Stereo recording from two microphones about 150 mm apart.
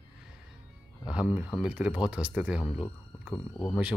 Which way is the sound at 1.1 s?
5° right (ahead or behind).